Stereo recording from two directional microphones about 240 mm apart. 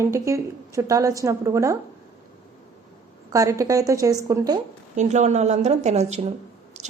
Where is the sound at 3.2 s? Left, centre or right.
Centre.